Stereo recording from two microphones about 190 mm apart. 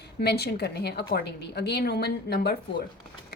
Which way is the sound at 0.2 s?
60° left (ahead or behind).